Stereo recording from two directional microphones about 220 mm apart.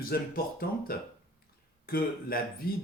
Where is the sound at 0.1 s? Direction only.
45° left (ahead or behind).